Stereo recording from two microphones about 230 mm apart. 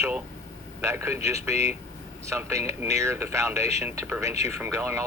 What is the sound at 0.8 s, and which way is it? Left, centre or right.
Speech, centre.